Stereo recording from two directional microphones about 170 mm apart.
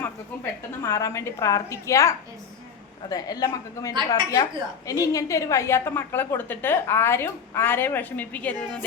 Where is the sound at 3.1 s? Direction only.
20° left (ahead or behind).